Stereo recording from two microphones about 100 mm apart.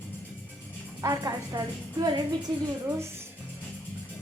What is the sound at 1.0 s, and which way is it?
A woman's voice, 35° right (ahead or behind).